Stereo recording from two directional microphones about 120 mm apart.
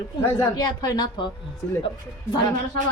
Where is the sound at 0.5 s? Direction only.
35° left (ahead or behind).